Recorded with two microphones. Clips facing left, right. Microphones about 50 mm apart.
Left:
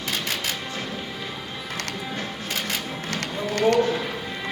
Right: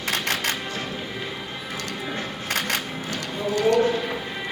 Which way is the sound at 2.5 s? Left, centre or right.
Right.